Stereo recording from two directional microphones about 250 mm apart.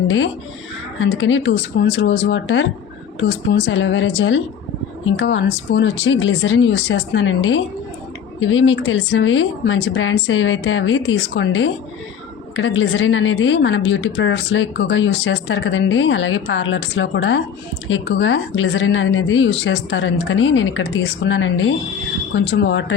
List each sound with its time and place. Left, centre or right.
0.9 s a woman's voice: left